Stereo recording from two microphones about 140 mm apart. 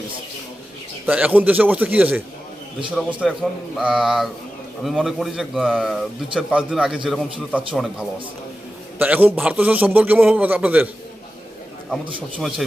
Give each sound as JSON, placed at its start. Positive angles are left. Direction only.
{"t": 1.0, "sound": "a man's voice", "side_deg": -10}
{"t": 3.8, "sound": "a man's voice", "side_deg": -5}
{"t": 12.4, "sound": "speech", "side_deg": 0}